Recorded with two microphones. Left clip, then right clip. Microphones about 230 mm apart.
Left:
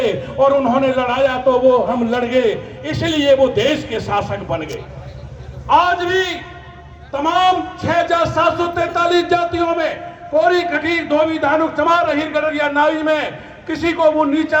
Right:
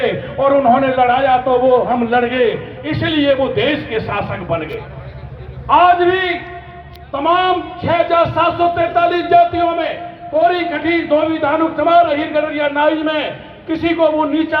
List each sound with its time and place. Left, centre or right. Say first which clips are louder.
0.0 s a man's voice: left 1 dB; left
5.6 s a man's voice: right 4 dB; left